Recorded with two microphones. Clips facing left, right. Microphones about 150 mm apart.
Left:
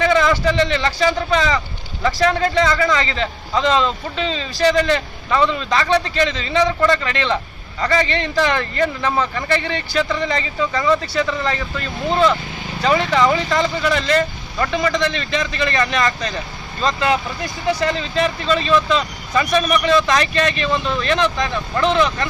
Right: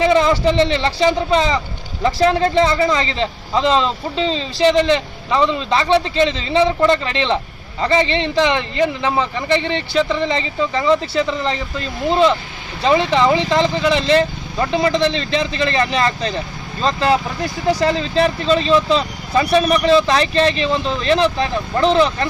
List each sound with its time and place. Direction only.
0.0 s a man's voice: 30° right (ahead or behind)